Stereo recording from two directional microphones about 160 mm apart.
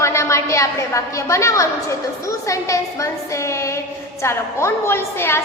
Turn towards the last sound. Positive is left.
turn(degrees=15)  # may be behind; listen again after turning